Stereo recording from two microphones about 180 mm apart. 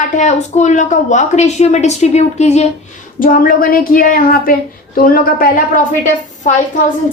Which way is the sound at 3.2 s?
50° left (ahead or behind).